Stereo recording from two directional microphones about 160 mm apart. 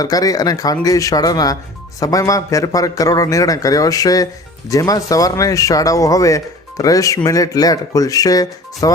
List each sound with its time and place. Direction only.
0.0 s speech: 25° left (ahead or behind)